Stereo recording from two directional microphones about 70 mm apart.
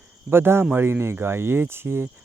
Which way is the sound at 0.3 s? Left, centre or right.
Right.